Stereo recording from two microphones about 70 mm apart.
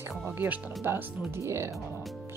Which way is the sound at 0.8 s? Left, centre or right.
Right.